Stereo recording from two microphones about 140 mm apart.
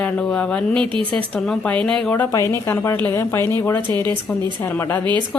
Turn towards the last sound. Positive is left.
turn(degrees=15)  # may be behind; listen again after turning